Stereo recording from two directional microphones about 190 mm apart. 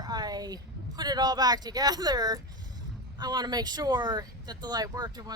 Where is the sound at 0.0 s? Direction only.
20° right (ahead or behind).